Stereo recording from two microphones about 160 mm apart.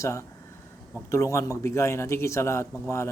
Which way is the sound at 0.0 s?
20° left (ahead or behind).